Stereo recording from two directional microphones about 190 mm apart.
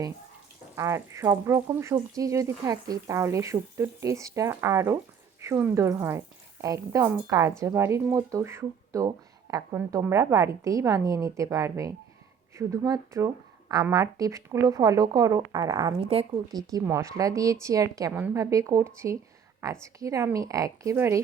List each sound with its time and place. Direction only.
0.8 s speech: 15° right (ahead or behind)